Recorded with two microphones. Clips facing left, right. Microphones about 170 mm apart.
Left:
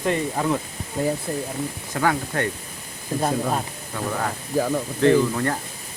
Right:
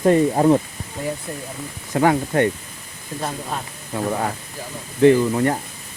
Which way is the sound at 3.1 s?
35° left (ahead or behind).